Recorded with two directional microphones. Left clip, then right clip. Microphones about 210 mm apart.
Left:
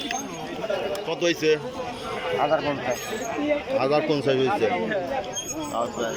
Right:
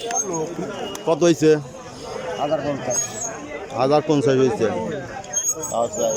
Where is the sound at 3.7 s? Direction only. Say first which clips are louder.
Right 7 dB; 15° right (ahead or behind).